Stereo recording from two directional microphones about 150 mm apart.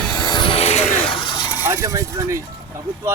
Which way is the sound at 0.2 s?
30° left (ahead or behind).